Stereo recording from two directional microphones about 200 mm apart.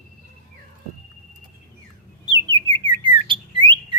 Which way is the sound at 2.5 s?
25° right (ahead or behind).